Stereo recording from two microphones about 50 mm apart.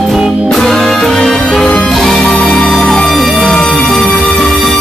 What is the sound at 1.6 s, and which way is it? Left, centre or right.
Music, left.